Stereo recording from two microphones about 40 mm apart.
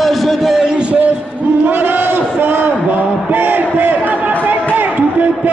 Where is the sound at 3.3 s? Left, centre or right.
Right.